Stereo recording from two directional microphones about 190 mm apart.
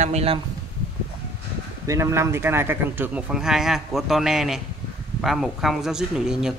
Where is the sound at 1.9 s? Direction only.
15° right (ahead or behind).